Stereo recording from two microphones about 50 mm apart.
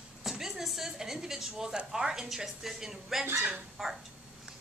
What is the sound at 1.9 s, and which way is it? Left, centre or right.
A woman's voice, centre.